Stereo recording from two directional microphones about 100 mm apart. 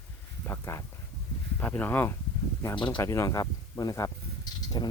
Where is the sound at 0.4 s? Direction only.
25° left (ahead or behind).